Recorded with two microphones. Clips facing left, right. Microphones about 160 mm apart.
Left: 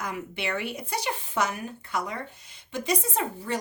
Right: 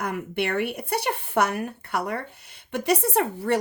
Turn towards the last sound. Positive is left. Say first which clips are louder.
# right 7 dB
turn(degrees=-65)  # may be behind; listen again after turning